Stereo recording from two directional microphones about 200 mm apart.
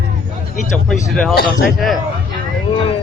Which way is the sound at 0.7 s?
Centre (ahead or behind).